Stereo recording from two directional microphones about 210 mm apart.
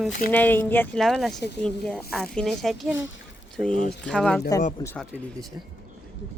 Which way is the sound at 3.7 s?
40° left (ahead or behind).